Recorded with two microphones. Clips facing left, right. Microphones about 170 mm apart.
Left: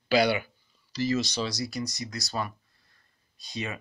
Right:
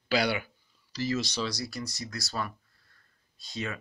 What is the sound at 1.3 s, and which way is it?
Speech, 20° left (ahead or behind).